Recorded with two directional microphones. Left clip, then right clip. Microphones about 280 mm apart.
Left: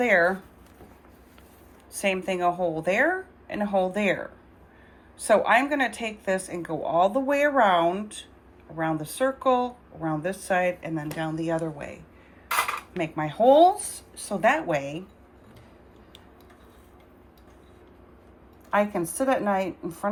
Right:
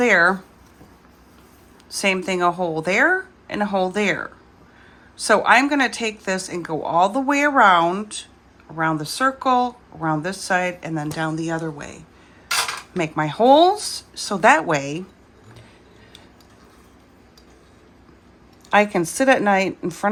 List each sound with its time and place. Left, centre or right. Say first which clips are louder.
0.0 s speech: right 5 dB; centre
2.0 s a woman's voice: right 5 dB; centre
18.7 s a woman's voice: right 7 dB; centre